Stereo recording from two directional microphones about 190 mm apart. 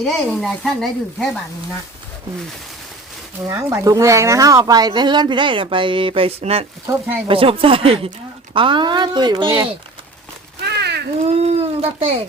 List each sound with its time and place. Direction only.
0.0 s speech: centre (ahead or behind)
3.4 s speech: 15° right (ahead or behind)
10.6 s a sound: 60° right (ahead or behind)
11.3 s speech: 35° right (ahead or behind)